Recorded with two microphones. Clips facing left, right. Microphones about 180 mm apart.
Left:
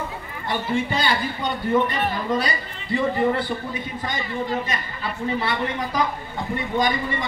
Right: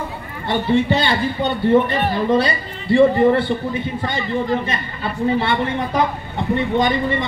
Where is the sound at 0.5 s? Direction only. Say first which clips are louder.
Right 7 dB; 25° right (ahead or behind).